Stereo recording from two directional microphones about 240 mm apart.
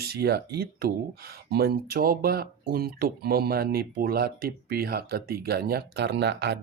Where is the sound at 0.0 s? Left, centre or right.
Right.